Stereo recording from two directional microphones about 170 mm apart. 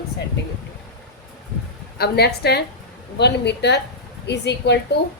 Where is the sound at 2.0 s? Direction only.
70° left (ahead or behind).